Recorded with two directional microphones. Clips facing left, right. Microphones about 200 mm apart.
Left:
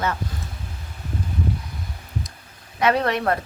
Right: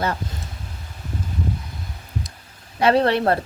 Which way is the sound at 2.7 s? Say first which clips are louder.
Right 3 dB; 30° right (ahead or behind).